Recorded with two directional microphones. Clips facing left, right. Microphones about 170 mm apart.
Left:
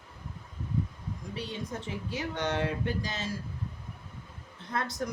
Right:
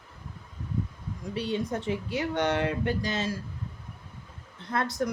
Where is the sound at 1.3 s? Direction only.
65° right (ahead or behind).